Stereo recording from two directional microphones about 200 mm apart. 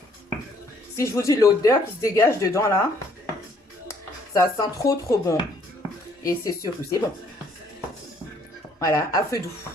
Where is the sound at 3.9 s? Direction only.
15° left (ahead or behind).